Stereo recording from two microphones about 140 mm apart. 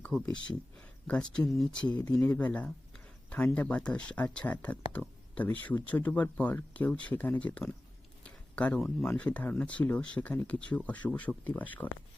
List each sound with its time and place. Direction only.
0.1 s speech: centre (ahead or behind)
2.0 s speech: 30° left (ahead or behind)
2.2 s speech: 10° left (ahead or behind)
8.2 s a sound: 10° left (ahead or behind)
9.0 s speech: 10° left (ahead or behind)